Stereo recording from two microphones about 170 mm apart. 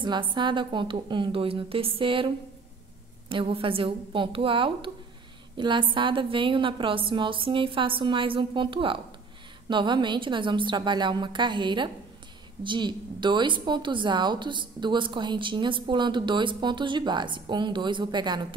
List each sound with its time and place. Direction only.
0.0 s a woman's voice: 30° right (ahead or behind)